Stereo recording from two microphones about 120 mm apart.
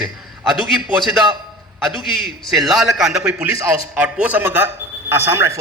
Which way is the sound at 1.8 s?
Centre (ahead or behind).